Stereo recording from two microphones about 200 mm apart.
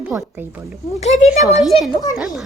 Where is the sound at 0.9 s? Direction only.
35° left (ahead or behind).